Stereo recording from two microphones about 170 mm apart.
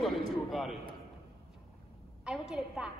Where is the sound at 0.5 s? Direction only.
Centre (ahead or behind).